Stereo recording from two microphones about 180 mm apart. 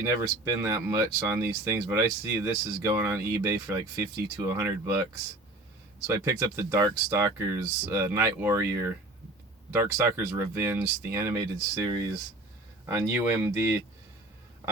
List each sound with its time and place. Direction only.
0.0 s speech: 20° right (ahead or behind)
6.2 s speech: 15° right (ahead or behind)